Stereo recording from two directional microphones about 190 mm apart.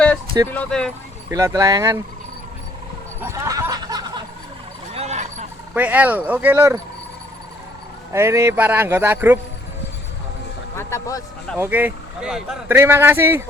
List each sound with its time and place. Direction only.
0.5 s speech: 5° left (ahead or behind)
1.3 s speech: 15° right (ahead or behind)
3.2 s a sound: 15° right (ahead or behind)
4.9 s a sound: 35° right (ahead or behind)
5.7 s speech: 10° right (ahead or behind)
8.1 s speech: 15° right (ahead or behind)
10.8 s speech: 15° left (ahead or behind)
11.5 s speech: 10° right (ahead or behind)